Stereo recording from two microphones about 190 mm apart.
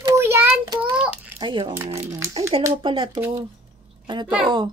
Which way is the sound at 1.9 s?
35° right (ahead or behind).